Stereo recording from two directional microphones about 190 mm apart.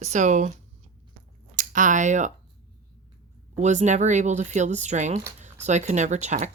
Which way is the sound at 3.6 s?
40° right (ahead or behind).